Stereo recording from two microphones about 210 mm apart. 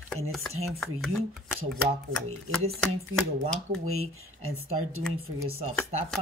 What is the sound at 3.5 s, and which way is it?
Speech, 90° right.